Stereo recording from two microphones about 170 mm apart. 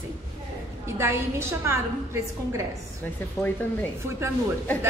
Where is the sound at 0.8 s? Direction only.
15° right (ahead or behind).